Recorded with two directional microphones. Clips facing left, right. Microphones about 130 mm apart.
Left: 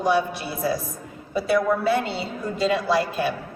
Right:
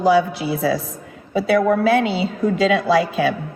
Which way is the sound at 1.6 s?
70° right (ahead or behind).